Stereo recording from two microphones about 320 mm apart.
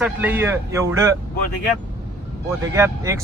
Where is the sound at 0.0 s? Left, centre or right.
Centre.